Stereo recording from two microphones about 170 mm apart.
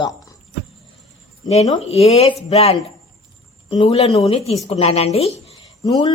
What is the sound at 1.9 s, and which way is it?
Speech, 40° left (ahead or behind).